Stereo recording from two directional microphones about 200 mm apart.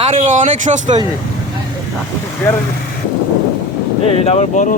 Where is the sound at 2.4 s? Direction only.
10° left (ahead or behind).